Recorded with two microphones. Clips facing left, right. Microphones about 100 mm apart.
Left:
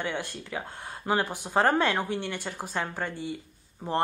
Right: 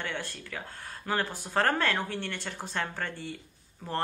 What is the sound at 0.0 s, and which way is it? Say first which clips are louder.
Speech: left 4 dB; 15° left (ahead or behind).